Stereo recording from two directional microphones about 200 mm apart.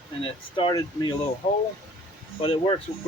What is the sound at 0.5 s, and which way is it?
Speech, 20° left (ahead or behind).